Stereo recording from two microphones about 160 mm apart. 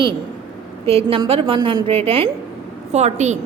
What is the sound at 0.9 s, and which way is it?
A woman's voice, 35° right (ahead or behind).